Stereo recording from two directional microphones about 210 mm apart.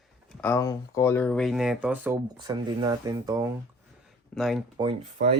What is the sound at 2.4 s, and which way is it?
Speech, 20° right (ahead or behind).